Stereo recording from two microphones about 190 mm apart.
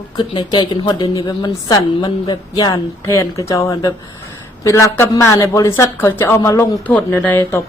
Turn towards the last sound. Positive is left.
turn(degrees=10)  # may be behind; listen again after turning